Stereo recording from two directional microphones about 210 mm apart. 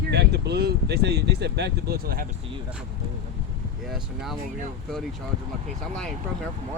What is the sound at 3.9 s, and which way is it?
Speech, centre (ahead or behind).